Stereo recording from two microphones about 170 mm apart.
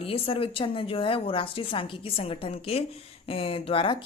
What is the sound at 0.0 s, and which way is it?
A woman's voice, 35° left (ahead or behind).